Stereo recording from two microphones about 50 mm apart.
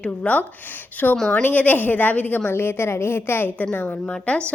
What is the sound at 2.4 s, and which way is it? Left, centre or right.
A woman's voice, left.